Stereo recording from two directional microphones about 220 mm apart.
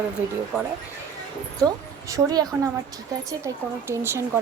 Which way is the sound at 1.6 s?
15° right (ahead or behind).